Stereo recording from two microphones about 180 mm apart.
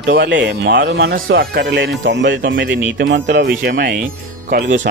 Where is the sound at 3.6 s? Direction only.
55° right (ahead or behind).